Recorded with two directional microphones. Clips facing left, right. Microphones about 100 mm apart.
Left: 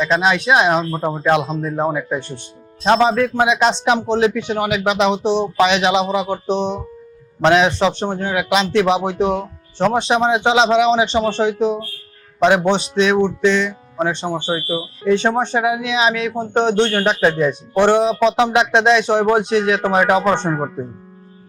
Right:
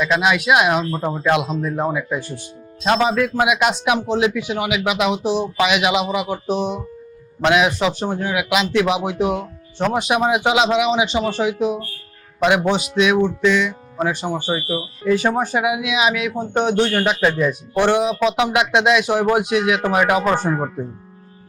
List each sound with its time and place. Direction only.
0.0 s speech: 30° left (ahead or behind)